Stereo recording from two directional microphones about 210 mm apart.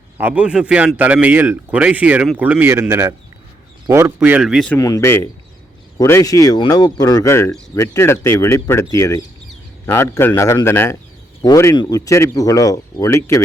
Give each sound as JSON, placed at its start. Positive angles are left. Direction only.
{"t": 0.2, "sound": "speech", "side_deg": -5}
{"t": 4.8, "sound": "speech", "side_deg": 15}